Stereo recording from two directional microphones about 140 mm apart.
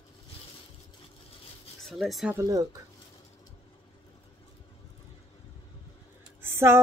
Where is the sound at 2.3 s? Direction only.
20° right (ahead or behind).